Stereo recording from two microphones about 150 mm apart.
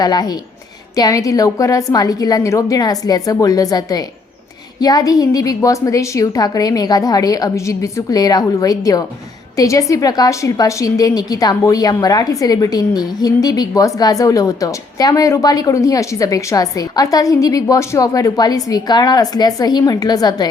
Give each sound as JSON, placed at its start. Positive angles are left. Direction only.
{"t": 0.0, "sound": "a woman's voice", "side_deg": 25}